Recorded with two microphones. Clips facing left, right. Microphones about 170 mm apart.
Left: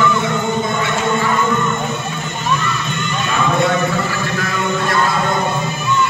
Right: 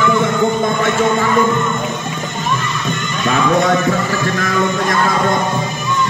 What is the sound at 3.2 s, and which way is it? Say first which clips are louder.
Music: right 3 dB; 45° right (ahead or behind).